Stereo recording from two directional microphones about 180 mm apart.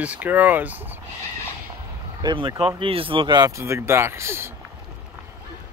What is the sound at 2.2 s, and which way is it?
Speech, 25° right (ahead or behind).